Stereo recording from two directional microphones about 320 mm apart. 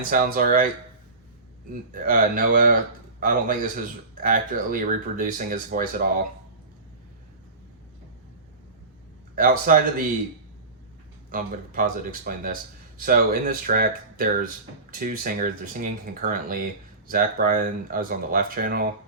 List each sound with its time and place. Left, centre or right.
0.1 s speech: right
1.9 s speech: right
9.3 s speech: right
11.3 s speech: right